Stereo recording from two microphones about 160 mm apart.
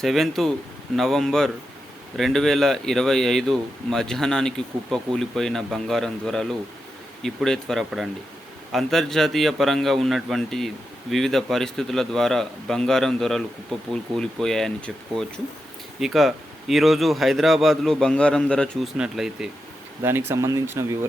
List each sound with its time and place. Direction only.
0.0 s speech: centre (ahead or behind)
20.0 s speech: 15° right (ahead or behind)